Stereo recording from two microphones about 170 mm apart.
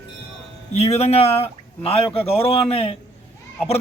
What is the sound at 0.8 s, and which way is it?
A man's voice, 40° left (ahead or behind).